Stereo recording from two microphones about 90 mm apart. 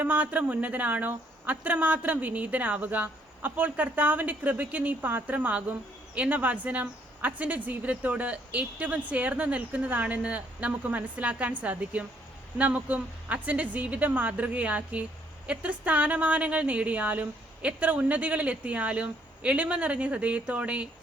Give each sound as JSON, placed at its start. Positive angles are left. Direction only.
{"t": 0.0, "sound": "a woman's voice", "side_deg": -15}